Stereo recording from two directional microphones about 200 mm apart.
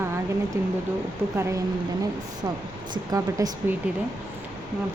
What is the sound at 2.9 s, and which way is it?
Speech, 15° right (ahead or behind).